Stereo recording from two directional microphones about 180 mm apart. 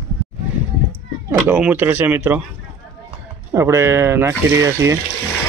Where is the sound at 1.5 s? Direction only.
10° right (ahead or behind).